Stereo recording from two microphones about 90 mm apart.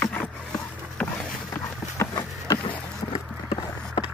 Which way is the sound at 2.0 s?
35° left (ahead or behind).